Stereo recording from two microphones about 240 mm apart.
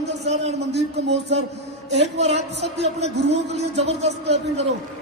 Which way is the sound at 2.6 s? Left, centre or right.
Right.